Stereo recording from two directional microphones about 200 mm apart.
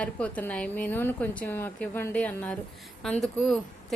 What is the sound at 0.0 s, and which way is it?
Speech, 5° left (ahead or behind).